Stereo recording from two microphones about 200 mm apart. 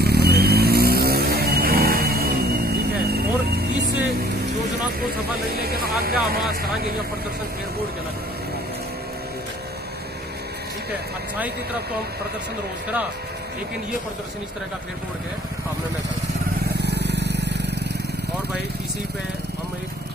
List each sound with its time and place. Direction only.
0.0 s vehicle: 50° right (ahead or behind)
5.5 s speech: 50° right (ahead or behind)
16.6 s vehicle: 55° right (ahead or behind)